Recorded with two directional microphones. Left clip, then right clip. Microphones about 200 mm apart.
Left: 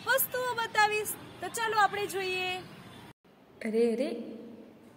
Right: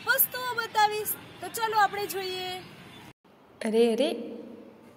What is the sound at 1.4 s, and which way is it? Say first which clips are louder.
Speech: right 2 dB; 15° left (ahead or behind).